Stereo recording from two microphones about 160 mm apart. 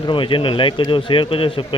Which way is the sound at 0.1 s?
30° left (ahead or behind).